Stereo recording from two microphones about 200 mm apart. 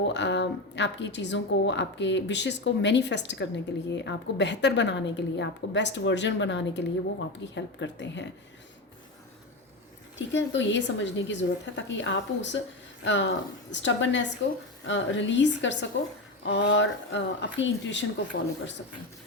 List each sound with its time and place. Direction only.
0.1 s a woman's voice: 60° left (ahead or behind)
10.2 s a woman's voice: 65° left (ahead or behind)